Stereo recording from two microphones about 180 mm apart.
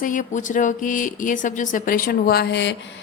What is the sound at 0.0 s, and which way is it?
A woman's voice, 45° left (ahead or behind).